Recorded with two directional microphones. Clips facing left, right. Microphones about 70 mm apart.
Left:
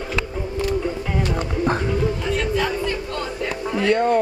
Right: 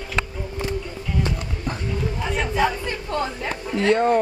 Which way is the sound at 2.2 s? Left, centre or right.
Centre.